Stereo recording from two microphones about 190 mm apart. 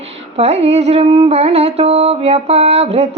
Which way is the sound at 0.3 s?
35° right (ahead or behind).